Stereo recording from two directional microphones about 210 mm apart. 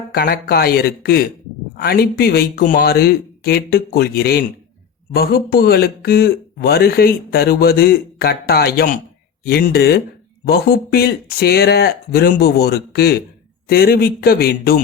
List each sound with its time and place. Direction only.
0.1 s speech: 45° left (ahead or behind)